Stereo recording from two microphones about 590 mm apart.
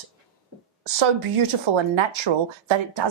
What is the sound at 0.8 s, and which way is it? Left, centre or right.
Speech, right.